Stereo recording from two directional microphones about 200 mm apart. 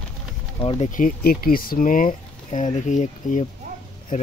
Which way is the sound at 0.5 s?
30° left (ahead or behind).